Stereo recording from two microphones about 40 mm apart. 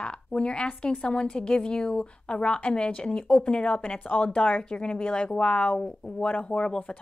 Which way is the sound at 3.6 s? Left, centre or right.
Left.